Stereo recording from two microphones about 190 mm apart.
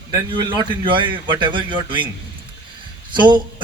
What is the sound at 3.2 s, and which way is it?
Speech, 25° right (ahead or behind).